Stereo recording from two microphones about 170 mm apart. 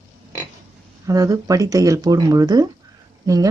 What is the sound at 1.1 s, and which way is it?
Speech, 20° right (ahead or behind).